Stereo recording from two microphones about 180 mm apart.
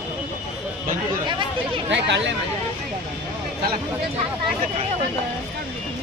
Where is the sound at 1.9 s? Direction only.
75° right (ahead or behind).